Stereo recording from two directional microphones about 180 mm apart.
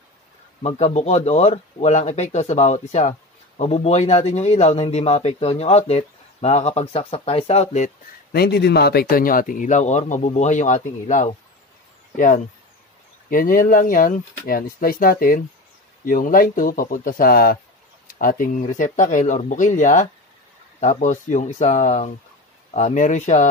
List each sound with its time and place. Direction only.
0.6 s speech: 35° left (ahead or behind)
8.3 s speech: 60° left (ahead or behind); by 11.2 s 45° left (ahead or behind)
13.3 s speech: 50° left (ahead or behind)